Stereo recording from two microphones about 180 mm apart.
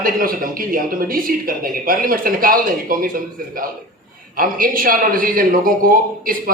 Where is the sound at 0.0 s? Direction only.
50° right (ahead or behind).